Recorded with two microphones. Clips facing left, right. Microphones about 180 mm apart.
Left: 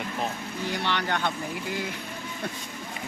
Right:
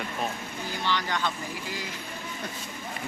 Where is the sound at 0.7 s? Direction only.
65° left (ahead or behind).